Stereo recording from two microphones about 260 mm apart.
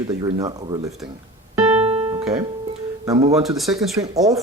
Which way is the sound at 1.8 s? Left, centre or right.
Right.